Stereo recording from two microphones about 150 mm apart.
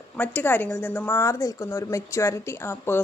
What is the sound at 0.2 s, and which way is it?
A woman's voice, 10° left (ahead or behind).